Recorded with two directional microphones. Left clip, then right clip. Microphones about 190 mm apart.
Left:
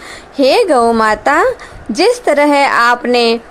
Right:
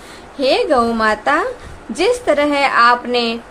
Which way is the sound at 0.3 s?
40° left (ahead or behind).